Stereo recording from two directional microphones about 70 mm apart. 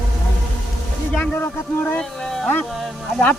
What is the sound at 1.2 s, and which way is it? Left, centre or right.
Speech, left.